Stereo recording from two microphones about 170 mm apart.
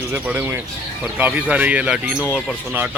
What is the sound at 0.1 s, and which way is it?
Speech, 10° right (ahead or behind).